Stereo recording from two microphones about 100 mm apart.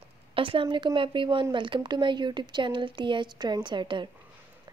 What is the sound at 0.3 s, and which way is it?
A woman's voice, 60° right (ahead or behind).